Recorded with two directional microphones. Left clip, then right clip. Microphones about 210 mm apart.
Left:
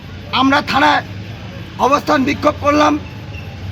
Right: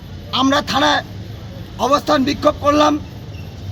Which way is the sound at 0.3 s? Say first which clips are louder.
Left 3 dB; 15° right (ahead or behind).